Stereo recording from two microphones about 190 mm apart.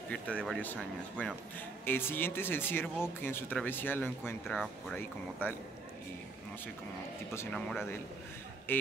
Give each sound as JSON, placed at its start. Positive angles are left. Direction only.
{"t": 0.1, "sound": "speech", "side_deg": 5}
{"t": 4.5, "sound": "speech", "side_deg": 0}
{"t": 5.4, "sound": "speech", "side_deg": 10}
{"t": 8.7, "sound": "speech", "side_deg": 10}